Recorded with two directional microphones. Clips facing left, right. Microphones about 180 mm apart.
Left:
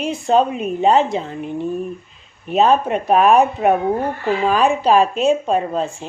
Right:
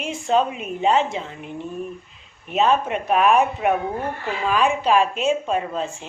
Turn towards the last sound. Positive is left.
turn(degrees=40)  # may be behind; listen again after turning